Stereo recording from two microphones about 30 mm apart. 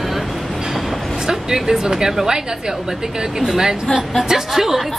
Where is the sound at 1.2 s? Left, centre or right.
Centre.